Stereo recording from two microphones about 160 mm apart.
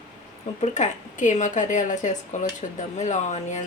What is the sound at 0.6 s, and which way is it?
Speech, 50° left (ahead or behind).